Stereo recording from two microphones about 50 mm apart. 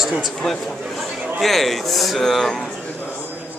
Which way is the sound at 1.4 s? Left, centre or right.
Centre.